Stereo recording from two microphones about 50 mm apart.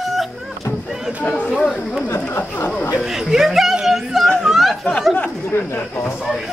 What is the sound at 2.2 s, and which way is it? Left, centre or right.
Speech, left.